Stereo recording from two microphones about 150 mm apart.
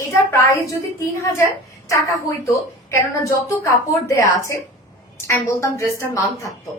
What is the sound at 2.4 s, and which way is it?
A woman's voice, 20° left (ahead or behind).